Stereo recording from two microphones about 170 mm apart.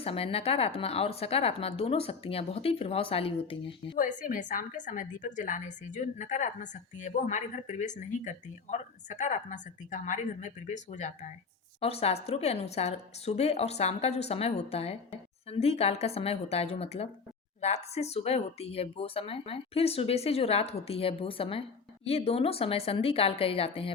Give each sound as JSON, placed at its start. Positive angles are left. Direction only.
{"t": 0.0, "sound": "a woman's voice", "side_deg": 35}
{"t": 3.9, "sound": "a woman's voice", "side_deg": 50}